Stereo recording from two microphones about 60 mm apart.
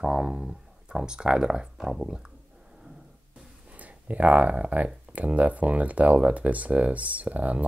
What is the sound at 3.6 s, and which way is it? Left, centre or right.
Speech, right.